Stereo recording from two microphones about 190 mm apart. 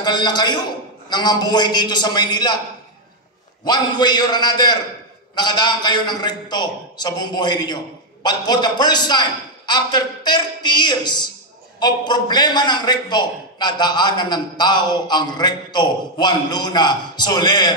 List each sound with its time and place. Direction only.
0.0 s a man's voice: 20° left (ahead or behind)
3.6 s a man's voice: 20° left (ahead or behind)